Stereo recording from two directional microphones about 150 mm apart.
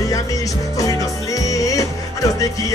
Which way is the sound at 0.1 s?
25° left (ahead or behind).